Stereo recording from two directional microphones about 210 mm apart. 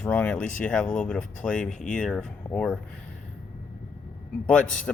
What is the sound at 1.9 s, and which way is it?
Speech, 5° left (ahead or behind).